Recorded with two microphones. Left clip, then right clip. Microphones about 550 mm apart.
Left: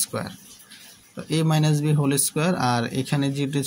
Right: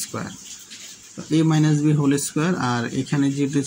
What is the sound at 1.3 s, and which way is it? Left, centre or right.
Speech, left.